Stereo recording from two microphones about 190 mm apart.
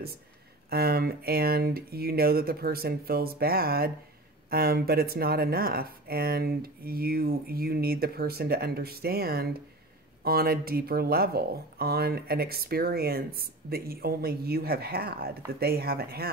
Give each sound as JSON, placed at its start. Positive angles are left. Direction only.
{"t": 0.7, "sound": "speech", "side_deg": -55}